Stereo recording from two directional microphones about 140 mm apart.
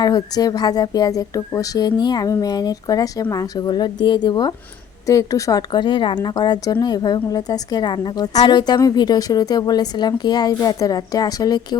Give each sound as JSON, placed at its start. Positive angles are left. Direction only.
{"t": 0.0, "sound": "a woman's voice", "side_deg": 30}